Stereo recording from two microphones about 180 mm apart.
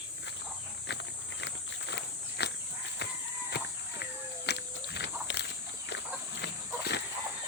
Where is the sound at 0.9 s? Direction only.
85° left.